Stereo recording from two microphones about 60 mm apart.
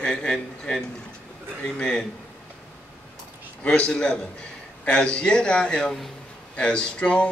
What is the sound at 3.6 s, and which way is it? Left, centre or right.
A man's voice, centre.